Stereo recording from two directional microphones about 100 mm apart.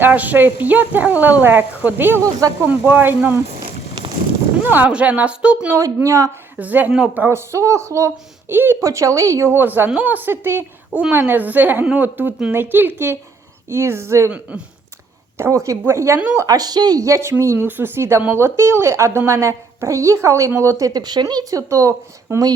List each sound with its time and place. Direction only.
0.0 s speech: 15° right (ahead or behind)
4.6 s speech: 20° right (ahead or behind)
5.7 s speech: 30° right (ahead or behind)
6.6 s speech: 15° right (ahead or behind)
14.3 s speech: 15° right (ahead or behind)
15.4 s speech: 30° right (ahead or behind)
16.4 s speech: 40° right (ahead or behind)